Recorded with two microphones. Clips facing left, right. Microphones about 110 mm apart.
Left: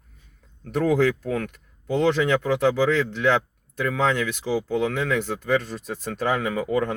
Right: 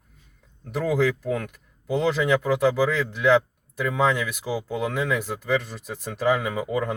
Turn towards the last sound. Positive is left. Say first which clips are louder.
# left 2 dB
turn(degrees=-10)  # may be behind; listen again after turning